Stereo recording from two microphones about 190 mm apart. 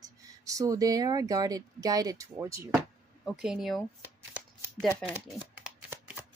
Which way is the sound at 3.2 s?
5° right (ahead or behind).